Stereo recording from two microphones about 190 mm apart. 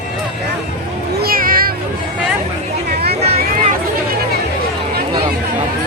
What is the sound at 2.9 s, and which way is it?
Vehicle, 55° right (ahead or behind).